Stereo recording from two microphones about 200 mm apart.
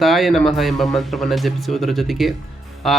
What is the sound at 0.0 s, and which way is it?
Speech, centre (ahead or behind).